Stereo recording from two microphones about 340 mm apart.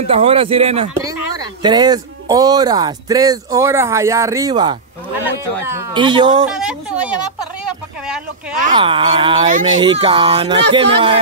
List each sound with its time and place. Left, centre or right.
0.0 s speech: centre
6.5 s speech: centre
8.5 s speech: centre